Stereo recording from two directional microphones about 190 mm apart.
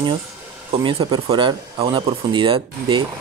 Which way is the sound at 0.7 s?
25° right (ahead or behind).